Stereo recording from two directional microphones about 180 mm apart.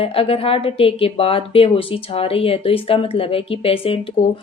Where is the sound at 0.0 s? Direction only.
30° left (ahead or behind).